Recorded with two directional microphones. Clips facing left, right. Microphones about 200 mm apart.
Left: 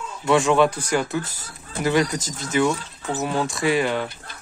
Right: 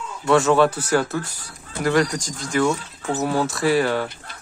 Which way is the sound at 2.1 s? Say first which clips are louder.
Even; 25° left (ahead or behind).